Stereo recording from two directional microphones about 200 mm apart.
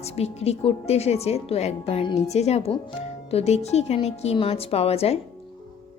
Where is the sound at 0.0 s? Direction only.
30° left (ahead or behind).